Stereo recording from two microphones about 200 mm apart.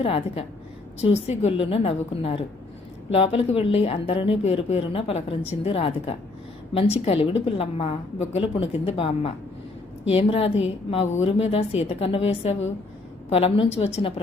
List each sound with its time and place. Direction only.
0.0 s a woman's voice: 30° left (ahead or behind)